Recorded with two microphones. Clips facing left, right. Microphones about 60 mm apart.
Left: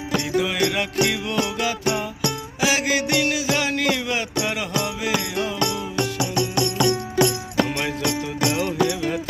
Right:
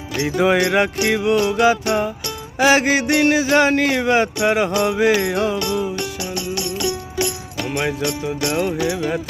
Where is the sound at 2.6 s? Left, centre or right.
Right.